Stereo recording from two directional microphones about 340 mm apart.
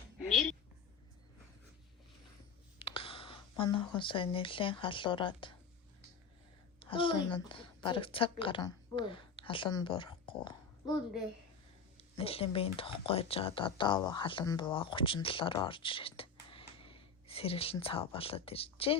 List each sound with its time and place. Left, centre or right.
0.3 s a woman's voice: centre
2.7 s speech: centre
6.7 s a woman's voice: centre
11.9 s speech: centre